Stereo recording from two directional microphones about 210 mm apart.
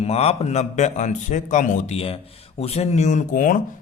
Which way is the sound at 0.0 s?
30° left (ahead or behind).